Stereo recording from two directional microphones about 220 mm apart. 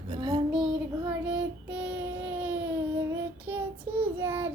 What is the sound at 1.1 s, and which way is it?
Child singing, 5° right (ahead or behind).